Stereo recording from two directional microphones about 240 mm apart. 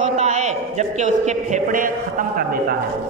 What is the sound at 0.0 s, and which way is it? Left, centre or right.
A man's voice, right.